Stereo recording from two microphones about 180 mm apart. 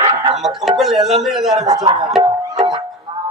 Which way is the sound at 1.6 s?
20° right (ahead or behind).